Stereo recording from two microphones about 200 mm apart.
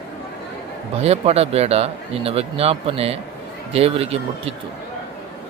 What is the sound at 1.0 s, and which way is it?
Speech, 30° right (ahead or behind).